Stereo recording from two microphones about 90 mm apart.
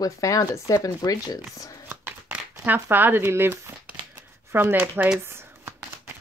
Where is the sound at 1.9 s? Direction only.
25° right (ahead or behind).